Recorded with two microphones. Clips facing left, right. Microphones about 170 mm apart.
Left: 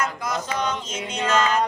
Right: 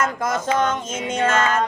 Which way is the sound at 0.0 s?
50° right (ahead or behind).